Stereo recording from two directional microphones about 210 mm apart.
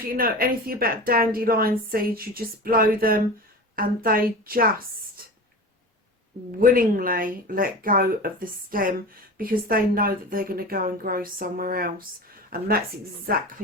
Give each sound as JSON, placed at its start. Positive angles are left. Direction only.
{"t": 0.1, "sound": "a woman's voice", "side_deg": -45}
{"t": 6.6, "sound": "a woman's voice", "side_deg": -40}